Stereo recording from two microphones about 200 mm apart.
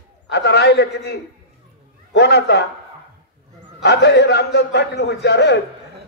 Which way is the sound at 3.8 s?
60° left (ahead or behind).